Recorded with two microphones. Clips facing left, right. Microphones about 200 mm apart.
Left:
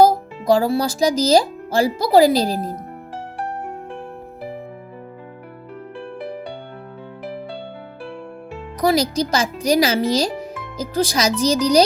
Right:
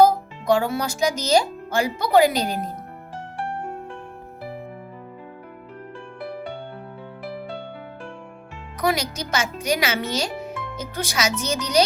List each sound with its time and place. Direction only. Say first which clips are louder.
0.0 s speech: left 2 dB; 35° left (ahead or behind)
8.8 s speech: left 6 dB; 35° left (ahead or behind)